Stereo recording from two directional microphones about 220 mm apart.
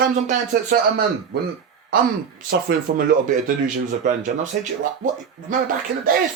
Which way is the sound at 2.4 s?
45° right (ahead or behind).